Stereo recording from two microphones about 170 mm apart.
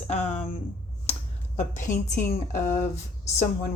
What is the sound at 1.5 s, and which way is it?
A woman's voice, 45° left (ahead or behind).